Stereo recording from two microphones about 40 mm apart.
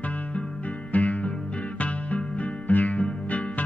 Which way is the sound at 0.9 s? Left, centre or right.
Left.